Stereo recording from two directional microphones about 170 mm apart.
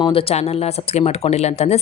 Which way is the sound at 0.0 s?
30° left (ahead or behind).